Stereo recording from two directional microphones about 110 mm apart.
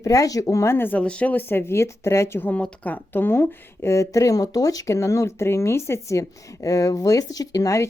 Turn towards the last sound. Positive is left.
turn(degrees=30)  # may be behind; listen again after turning